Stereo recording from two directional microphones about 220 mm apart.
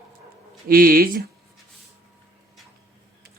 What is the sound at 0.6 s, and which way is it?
Speech, 40° right (ahead or behind).